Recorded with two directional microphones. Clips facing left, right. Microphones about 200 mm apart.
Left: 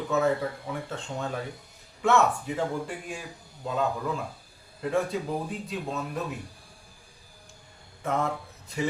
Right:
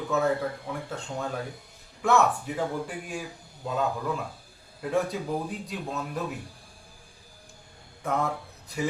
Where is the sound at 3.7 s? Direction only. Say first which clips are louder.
Even; centre (ahead or behind).